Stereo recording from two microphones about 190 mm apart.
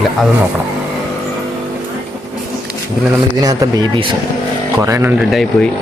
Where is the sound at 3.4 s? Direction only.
20° right (ahead or behind).